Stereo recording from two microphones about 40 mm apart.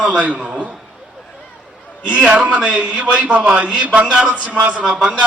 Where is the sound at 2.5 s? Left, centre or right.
Right.